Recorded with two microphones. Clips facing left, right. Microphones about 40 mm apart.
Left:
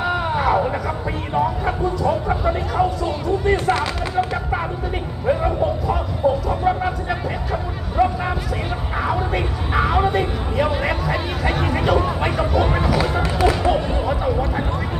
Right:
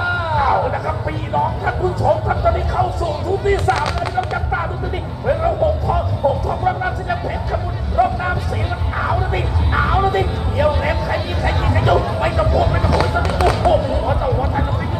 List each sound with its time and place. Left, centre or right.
0.0 s vehicle: centre
2.2 s speech: centre
5.9 s a sound: centre
12.5 s speech: left
12.7 s basketball bounce: centre